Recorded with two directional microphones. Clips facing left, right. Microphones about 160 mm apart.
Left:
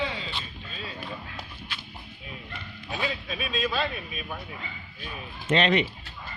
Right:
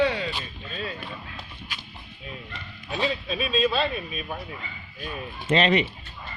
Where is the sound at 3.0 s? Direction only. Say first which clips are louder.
Right 5 dB; 25° right (ahead or behind).